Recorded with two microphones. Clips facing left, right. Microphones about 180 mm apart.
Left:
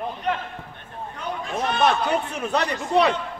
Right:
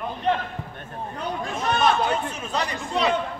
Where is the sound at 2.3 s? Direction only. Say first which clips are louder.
Left 4 dB; 60° left (ahead or behind).